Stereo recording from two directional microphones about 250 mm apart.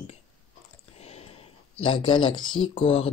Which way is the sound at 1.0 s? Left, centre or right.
Left.